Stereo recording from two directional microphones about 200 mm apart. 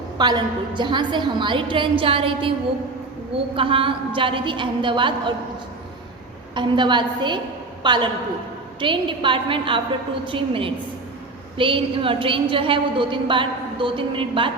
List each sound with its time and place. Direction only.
0.2 s a woman's voice: 20° right (ahead or behind)
3.5 s a woman's voice: 25° right (ahead or behind)
6.5 s a woman's voice: 25° right (ahead or behind)